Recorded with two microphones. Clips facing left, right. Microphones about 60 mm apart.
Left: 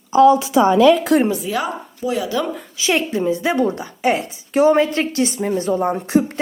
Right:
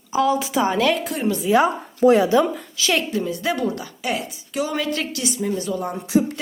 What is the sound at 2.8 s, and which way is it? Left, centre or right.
A woman's voice, left.